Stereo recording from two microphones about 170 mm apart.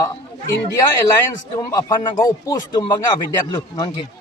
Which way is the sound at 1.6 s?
20° left (ahead or behind).